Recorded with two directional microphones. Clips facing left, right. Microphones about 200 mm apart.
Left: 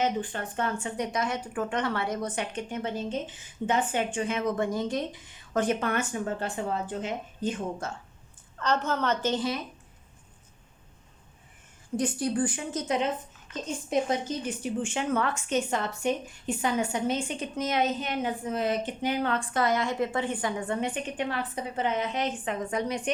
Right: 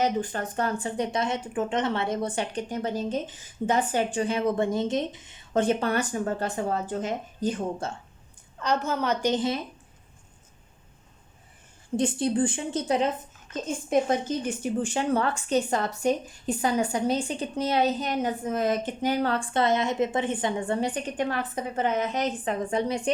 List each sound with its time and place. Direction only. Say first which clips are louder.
0.0 s a woman's voice: right 2 dB; 40° right (ahead or behind)
8.5 s a woman's voice: right 1 dB; 10° right (ahead or behind)
11.9 s a woman's voice: right 3 dB; 25° right (ahead or behind)
14.1 s a woman's voice: right 3 dB; 45° right (ahead or behind); by 23.1 s 30° right (ahead or behind)